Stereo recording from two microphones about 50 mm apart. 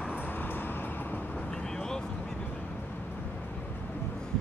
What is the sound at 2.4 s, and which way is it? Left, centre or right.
Vehicle, left.